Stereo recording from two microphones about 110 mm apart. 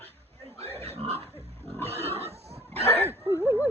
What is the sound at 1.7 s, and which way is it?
Pig, 20° left (ahead or behind).